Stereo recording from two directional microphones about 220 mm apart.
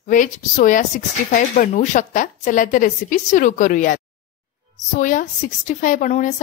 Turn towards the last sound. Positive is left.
turn(degrees=35)  # may be behind; listen again after turning